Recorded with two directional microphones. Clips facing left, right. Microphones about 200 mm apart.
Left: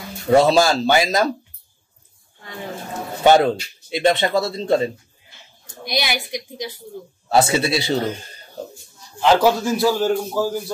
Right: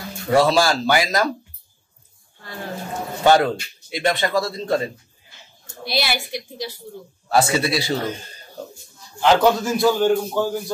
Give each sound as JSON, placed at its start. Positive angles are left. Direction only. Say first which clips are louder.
{"t": 0.3, "sound": "speech", "louder": "left 3 dB", "side_deg": 20}
{"t": 3.3, "sound": "speech", "louder": "left 2 dB", "side_deg": 20}
{"t": 5.9, "sound": "a woman's voice", "louder": "even", "side_deg": 15}
{"t": 9.2, "sound": "a man's voice", "louder": "even", "side_deg": 0}